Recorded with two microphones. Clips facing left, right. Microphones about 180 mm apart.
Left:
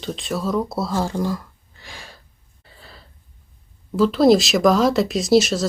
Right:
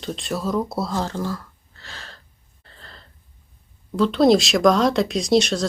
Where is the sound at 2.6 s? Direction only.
5° left (ahead or behind).